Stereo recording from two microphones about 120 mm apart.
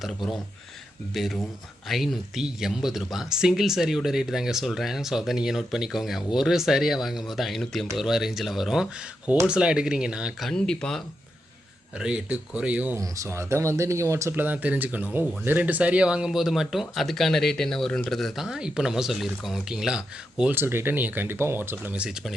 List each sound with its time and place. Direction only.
1.1 s speech: centre (ahead or behind)
10.5 s speech: 5° left (ahead or behind)
11.9 s speech: 10° right (ahead or behind)
13.0 s speech: 25° right (ahead or behind); by 20.6 s 5° right (ahead or behind)
20.6 s speech: 20° right (ahead or behind)